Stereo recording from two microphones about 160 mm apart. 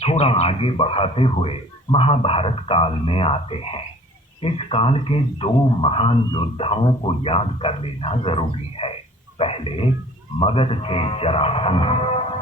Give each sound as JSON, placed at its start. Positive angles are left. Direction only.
{"t": 0.0, "sound": "speech", "side_deg": 40}